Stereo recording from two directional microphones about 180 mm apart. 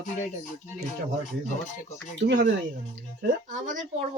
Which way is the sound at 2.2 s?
70° right (ahead or behind).